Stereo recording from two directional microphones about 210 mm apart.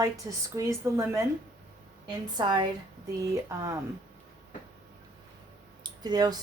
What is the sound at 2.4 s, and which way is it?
A woman's voice, 20° right (ahead or behind).